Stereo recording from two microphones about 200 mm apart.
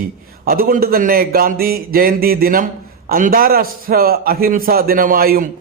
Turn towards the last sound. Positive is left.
turn(degrees=-45)  # may be behind; listen again after turning